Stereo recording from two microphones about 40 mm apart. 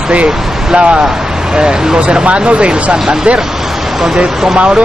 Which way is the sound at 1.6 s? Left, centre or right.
Right.